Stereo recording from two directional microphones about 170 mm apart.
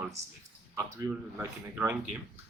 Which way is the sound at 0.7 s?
10° right (ahead or behind).